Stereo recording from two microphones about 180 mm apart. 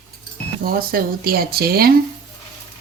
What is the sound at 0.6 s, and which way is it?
Speech, 55° right (ahead or behind).